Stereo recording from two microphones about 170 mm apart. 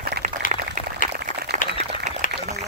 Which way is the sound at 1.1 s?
70° right (ahead or behind).